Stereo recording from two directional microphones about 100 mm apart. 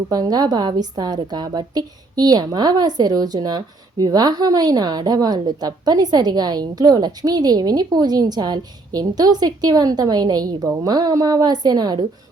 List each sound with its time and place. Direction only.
0.1 s a woman's voice: 40° right (ahead or behind)